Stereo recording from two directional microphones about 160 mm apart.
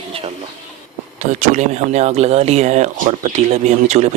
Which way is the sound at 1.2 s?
50° right (ahead or behind).